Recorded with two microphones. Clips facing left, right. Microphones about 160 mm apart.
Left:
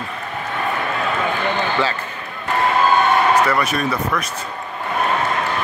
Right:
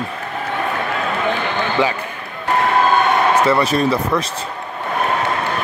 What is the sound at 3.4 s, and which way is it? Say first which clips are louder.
Speech: right 4 dB; 30° right (ahead or behind).